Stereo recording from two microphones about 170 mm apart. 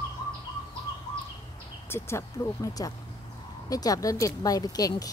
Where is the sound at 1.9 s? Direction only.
20° left (ahead or behind).